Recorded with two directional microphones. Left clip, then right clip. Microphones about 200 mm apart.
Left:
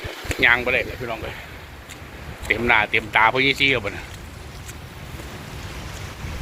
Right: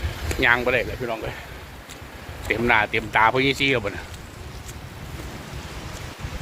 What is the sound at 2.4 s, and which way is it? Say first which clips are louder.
Speech: left 1 dB; 15° right (ahead or behind).